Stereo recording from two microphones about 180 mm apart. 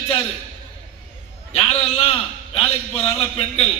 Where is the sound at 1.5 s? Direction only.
30° left (ahead or behind).